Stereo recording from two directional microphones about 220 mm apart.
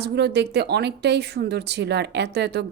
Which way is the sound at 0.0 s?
50° right (ahead or behind).